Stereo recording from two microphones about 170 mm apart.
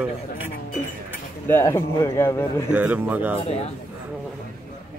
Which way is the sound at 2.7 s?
10° right (ahead or behind).